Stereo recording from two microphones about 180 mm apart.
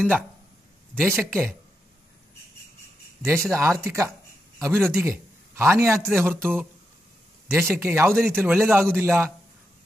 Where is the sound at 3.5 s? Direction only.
15° right (ahead or behind).